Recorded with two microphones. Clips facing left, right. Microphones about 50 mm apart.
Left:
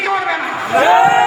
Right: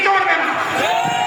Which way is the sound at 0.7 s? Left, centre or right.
Left.